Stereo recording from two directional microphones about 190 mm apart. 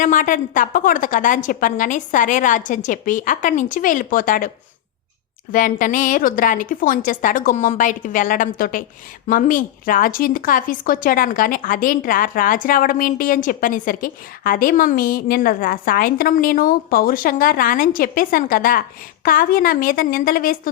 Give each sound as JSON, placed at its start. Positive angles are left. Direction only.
{"t": 0.0, "sound": "speech", "side_deg": 45}